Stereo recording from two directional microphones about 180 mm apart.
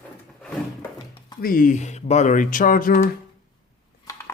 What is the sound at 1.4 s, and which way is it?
Speech, 50° left (ahead or behind).